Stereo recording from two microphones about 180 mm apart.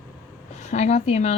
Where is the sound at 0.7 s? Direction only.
40° left (ahead or behind).